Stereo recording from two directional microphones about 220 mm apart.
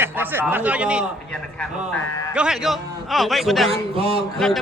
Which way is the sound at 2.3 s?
5° right (ahead or behind).